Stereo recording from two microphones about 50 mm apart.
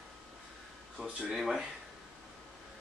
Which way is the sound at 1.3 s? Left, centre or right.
Centre.